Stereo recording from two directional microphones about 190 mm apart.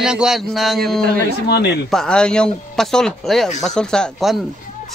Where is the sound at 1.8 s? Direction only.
5° left (ahead or behind).